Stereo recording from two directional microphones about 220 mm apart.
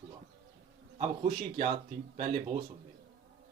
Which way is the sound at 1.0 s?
35° right (ahead or behind).